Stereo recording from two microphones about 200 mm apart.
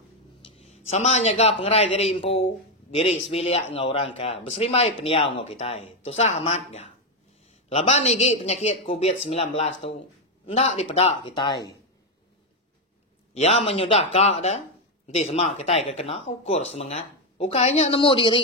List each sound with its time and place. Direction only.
0.6 s a man's voice: 35° left (ahead or behind)
13.3 s a man's voice: 30° left (ahead or behind)